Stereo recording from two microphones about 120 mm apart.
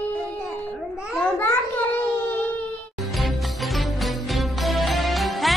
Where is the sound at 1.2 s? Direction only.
15° left (ahead or behind).